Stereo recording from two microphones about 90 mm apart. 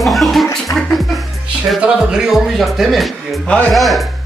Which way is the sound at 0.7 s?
40° left (ahead or behind).